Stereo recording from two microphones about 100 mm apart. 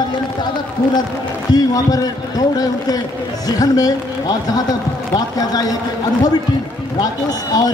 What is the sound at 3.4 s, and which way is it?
A man's voice, 35° left (ahead or behind).